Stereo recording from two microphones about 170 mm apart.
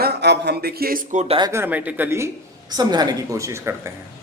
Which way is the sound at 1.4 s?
15° right (ahead or behind).